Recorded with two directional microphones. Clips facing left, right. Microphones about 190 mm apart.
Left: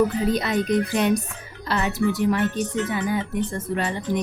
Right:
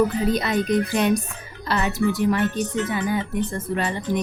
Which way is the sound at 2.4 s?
50° left (ahead or behind).